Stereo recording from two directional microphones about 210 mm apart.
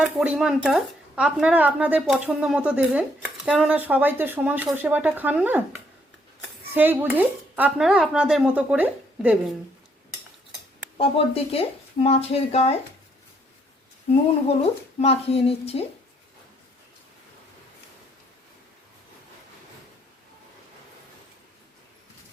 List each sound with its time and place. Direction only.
0.2 s speech: 5° right (ahead or behind)
6.7 s speech: 10° right (ahead or behind)
10.9 s speech: 30° left (ahead or behind)
14.9 s speech: 30° left (ahead or behind)